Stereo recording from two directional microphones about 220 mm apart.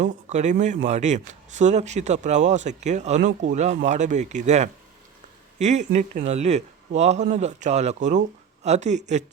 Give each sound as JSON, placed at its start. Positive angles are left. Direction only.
{"t": 0.0, "sound": "speech", "side_deg": -30}